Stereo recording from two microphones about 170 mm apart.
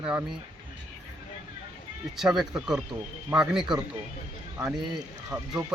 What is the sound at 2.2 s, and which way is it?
Speech, 5° right (ahead or behind).